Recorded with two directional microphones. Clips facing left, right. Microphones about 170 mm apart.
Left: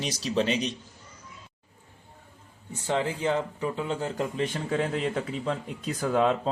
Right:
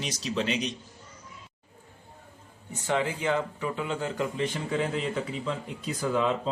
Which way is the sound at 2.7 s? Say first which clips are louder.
Even; 30° left (ahead or behind).